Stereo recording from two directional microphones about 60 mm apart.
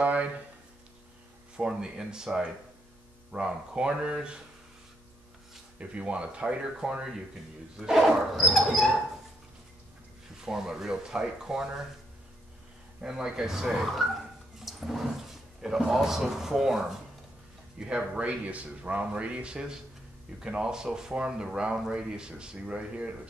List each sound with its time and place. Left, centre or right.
0.0 s a sound: right
1.7 s speech: centre
5.8 s speech: centre
8.4 s dog: centre
10.4 s speech: centre
13.0 s speech: centre
14.6 s a sound: centre
15.9 s speech: centre